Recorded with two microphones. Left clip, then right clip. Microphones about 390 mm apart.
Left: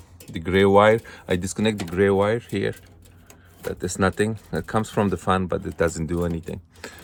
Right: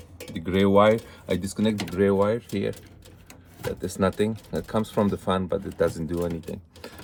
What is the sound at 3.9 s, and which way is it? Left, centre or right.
Speech, left.